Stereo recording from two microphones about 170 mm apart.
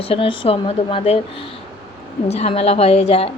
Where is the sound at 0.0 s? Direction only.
35° left (ahead or behind).